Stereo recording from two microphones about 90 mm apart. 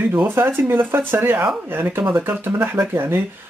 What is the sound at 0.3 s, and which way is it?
Speech, 25° right (ahead or behind).